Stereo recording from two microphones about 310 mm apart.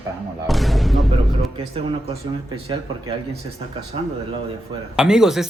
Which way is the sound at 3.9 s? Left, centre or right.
Centre.